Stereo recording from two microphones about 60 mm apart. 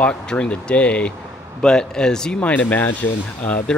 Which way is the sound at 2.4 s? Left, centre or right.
Left.